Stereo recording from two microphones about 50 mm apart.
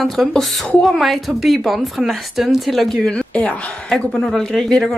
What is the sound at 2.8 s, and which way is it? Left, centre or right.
Speech, centre.